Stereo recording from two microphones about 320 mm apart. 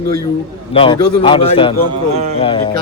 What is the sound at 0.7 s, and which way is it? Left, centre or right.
A man's voice, centre.